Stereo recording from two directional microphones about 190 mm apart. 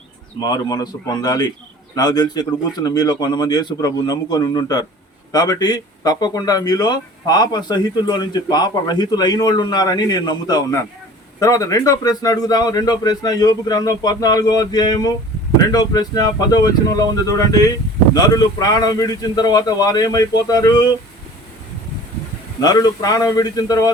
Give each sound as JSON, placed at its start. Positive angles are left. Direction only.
{"t": 0.3, "sound": "speech", "side_deg": 20}
{"t": 22.6, "sound": "speech", "side_deg": 20}